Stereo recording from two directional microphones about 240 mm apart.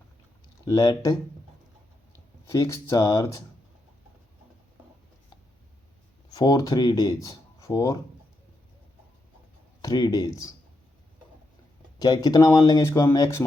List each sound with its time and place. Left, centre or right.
0.6 s speech: centre
2.5 s speech: centre
6.3 s speech: centre
9.8 s speech: centre
11.9 s speech: centre